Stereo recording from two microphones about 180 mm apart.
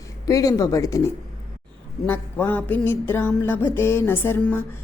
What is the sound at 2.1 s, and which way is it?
Mantra, 10° left (ahead or behind).